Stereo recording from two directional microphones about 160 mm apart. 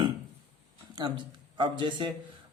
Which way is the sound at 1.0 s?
25° right (ahead or behind).